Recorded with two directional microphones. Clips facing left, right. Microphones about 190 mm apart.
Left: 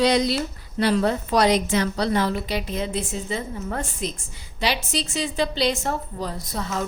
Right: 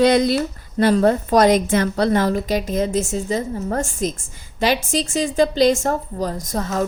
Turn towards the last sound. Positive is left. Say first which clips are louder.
# right 6 dB
turn(degrees=-45)  # may be behind; listen again after turning